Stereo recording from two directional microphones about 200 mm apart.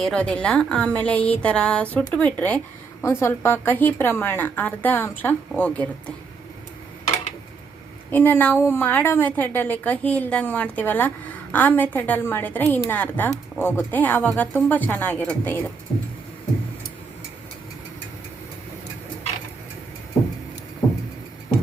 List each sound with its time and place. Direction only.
0.0 s a woman's voice: 5° left (ahead or behind)
8.1 s a woman's voice: 10° left (ahead or behind)